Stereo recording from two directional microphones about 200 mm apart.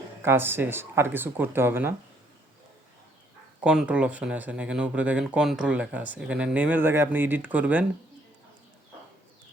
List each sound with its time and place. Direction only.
0.2 s speech: 10° right (ahead or behind)
3.6 s speech: 5° right (ahead or behind)